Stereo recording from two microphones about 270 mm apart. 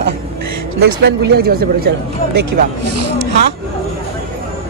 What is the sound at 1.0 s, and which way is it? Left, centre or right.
Speech, right.